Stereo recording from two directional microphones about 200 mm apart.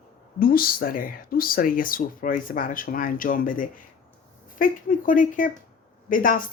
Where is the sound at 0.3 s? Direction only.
45° left (ahead or behind).